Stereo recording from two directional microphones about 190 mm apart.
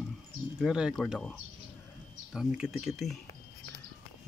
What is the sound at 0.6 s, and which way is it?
Speech, 5° right (ahead or behind).